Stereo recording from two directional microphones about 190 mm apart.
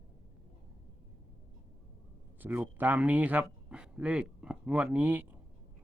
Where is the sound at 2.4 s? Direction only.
10° right (ahead or behind).